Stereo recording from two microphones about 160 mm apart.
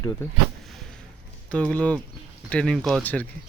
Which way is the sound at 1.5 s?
10° left (ahead or behind).